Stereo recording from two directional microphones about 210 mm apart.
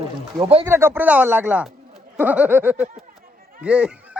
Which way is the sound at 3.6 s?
5° right (ahead or behind).